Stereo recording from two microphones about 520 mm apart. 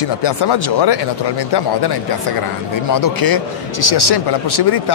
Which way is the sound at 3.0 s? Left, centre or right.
Left.